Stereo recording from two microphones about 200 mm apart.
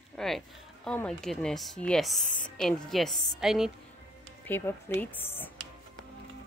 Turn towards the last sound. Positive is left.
turn(degrees=10)  # may be behind; listen again after turning